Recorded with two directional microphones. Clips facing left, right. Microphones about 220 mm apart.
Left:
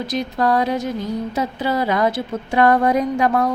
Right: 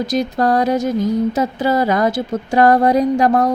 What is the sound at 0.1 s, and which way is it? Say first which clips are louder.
A woman's voice: right 2 dB; 45° right (ahead or behind).